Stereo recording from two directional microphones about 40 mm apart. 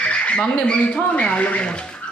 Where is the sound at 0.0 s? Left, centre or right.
Left.